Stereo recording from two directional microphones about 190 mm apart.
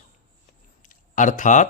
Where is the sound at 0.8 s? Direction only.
40° left (ahead or behind).